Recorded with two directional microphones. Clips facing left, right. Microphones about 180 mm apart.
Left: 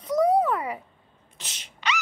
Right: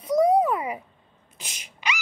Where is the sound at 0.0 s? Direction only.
10° right (ahead or behind).